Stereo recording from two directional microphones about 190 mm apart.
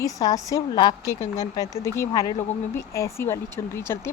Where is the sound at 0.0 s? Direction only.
20° left (ahead or behind).